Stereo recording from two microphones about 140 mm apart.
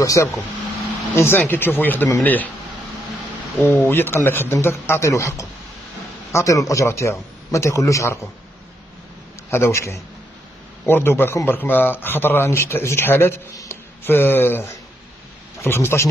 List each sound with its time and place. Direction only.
0.0 s a man's voice: 25° left (ahead or behind)
3.6 s a man's voice: 15° left (ahead or behind)
9.5 s a man's voice: 20° left (ahead or behind)